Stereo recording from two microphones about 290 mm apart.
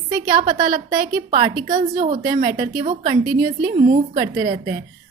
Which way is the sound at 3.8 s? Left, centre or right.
Right.